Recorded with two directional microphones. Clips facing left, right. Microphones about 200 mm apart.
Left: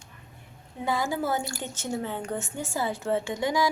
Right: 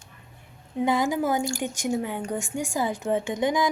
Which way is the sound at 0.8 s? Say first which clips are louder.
Right 4 dB; 20° right (ahead or behind).